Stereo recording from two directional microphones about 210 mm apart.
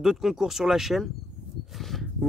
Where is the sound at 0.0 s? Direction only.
Centre (ahead or behind).